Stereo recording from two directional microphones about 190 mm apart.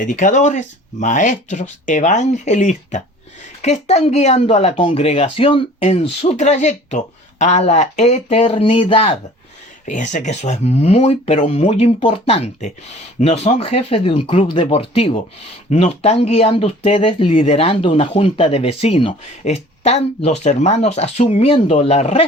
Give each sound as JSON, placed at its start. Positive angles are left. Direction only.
{"t": 0.0, "sound": "speech", "side_deg": 40}